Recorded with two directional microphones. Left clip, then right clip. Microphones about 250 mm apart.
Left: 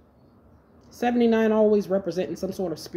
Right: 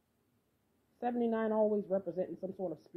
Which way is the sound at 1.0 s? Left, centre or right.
Centre.